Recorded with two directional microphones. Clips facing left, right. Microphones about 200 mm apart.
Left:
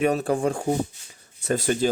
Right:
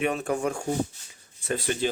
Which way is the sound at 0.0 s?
40° left (ahead or behind).